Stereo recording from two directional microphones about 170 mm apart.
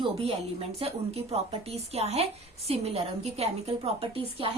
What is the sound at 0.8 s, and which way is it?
A woman's voice, 35° right (ahead or behind).